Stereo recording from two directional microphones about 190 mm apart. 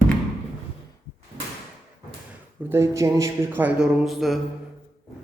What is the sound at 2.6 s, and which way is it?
Speech, 10° right (ahead or behind).